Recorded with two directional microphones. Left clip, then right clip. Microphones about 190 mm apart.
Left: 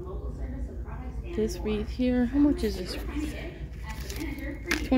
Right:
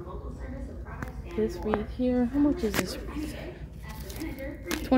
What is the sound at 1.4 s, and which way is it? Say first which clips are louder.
Speech: right 2 dB; 15° left (ahead or behind).